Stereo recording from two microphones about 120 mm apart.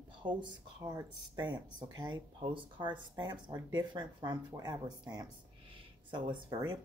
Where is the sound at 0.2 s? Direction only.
40° right (ahead or behind).